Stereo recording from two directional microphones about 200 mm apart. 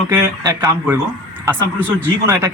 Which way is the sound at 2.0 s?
15° right (ahead or behind).